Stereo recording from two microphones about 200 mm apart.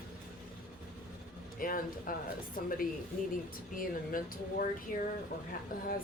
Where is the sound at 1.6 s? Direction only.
45° left (ahead or behind).